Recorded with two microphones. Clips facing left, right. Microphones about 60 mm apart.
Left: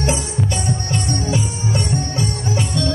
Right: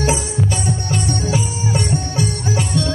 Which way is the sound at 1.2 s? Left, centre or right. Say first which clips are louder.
Right 1 dB; centre.